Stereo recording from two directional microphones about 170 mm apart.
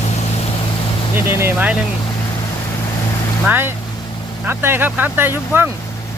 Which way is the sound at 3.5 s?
10° right (ahead or behind).